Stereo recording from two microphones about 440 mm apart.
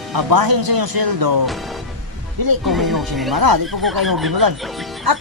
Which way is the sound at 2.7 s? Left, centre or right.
Centre.